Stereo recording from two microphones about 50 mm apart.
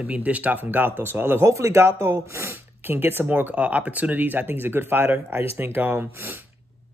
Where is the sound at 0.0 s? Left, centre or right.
Right.